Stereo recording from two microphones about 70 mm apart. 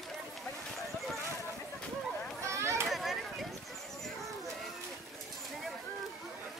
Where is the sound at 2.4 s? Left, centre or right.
Right.